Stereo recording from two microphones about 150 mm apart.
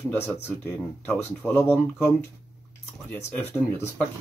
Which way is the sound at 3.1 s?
15° left (ahead or behind).